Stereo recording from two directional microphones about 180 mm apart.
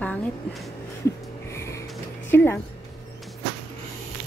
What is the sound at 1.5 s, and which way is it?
Music, 15° left (ahead or behind).